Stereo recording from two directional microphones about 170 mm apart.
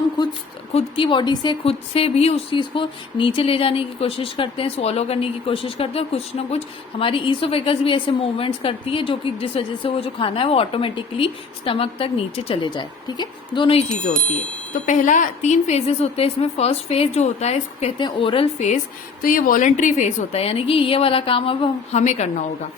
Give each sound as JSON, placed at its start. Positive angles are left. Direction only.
{"t": 0.2, "sound": "a sound", "side_deg": 25}
{"t": 0.7, "sound": "a woman's voice", "side_deg": 35}
{"t": 17.9, "sound": "a woman's voice", "side_deg": 30}
{"t": 19.2, "sound": "a woman's voice", "side_deg": 55}